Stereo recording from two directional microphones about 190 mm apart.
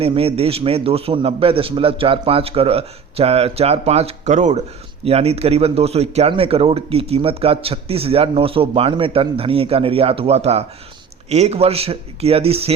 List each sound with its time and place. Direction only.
0.0 s speech: 30° right (ahead or behind)